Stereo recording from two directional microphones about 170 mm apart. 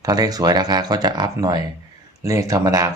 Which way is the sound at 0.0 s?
20° right (ahead or behind).